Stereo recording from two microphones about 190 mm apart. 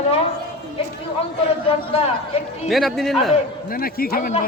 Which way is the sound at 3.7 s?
50° left (ahead or behind).